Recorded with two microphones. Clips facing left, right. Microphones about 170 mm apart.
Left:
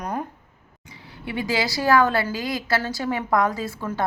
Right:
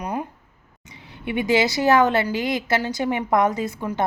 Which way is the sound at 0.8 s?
20° right (ahead or behind).